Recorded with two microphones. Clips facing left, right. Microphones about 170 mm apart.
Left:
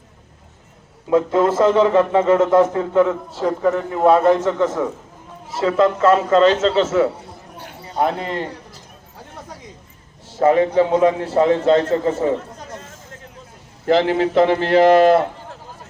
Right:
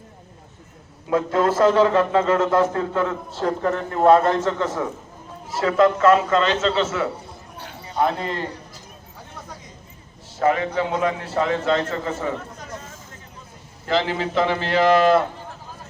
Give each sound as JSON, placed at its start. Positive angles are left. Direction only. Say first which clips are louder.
{"t": 1.1, "sound": "a man's voice", "louder": "left 4 dB", "side_deg": 20}
{"t": 3.4, "sound": "a man's voice", "louder": "left 4 dB", "side_deg": 5}
{"t": 7.6, "sound": "clip-clop", "louder": "left 2 dB", "side_deg": 45}
{"t": 10.4, "sound": "a man's voice", "louder": "left 6 dB", "side_deg": 35}
{"t": 13.8, "sound": "a man's voice", "louder": "left 7 dB", "side_deg": 55}